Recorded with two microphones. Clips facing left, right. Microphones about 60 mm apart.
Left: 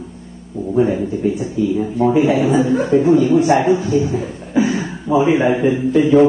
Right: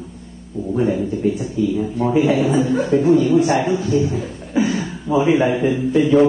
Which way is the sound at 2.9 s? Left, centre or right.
Left.